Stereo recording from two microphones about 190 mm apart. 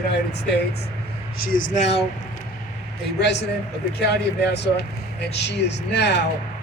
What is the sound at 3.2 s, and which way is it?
Speech, 65° left (ahead or behind).